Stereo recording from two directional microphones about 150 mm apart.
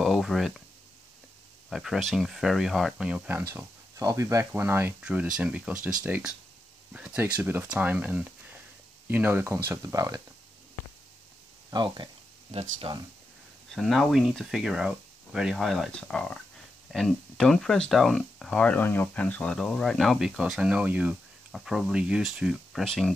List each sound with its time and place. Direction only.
0.0 s a sound: centre (ahead or behind)
1.7 s speech: centre (ahead or behind)
3.5 s speech: 20° right (ahead or behind)
11.7 s speech: 30° right (ahead or behind)
12.4 s speech: 45° right (ahead or behind)
13.7 s speech: centre (ahead or behind)